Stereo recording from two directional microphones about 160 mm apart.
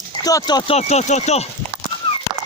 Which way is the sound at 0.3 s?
25° left (ahead or behind).